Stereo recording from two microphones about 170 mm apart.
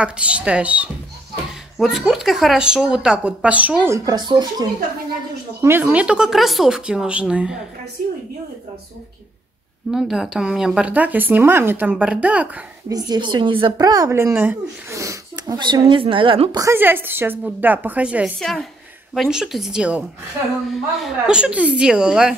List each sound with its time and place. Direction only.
0.0 s speech: 5° right (ahead or behind); by 4.6 s 25° right (ahead or behind)
5.6 s speech: 10° right (ahead or behind)
9.8 s speech: centre (ahead or behind)
12.9 s a woman's voice: 25° right (ahead or behind)
16.6 s speech: 10° right (ahead or behind)